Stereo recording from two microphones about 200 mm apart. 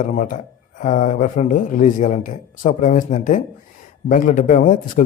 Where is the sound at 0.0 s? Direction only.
40° left (ahead or behind).